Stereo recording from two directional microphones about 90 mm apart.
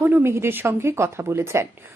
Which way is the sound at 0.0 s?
25° right (ahead or behind).